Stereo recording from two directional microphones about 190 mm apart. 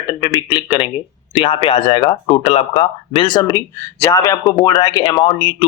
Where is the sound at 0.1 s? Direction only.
20° left (ahead or behind).